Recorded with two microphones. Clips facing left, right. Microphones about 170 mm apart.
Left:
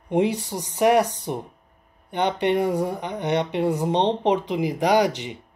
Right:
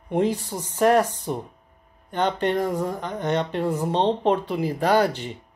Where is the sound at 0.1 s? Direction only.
15° left (ahead or behind).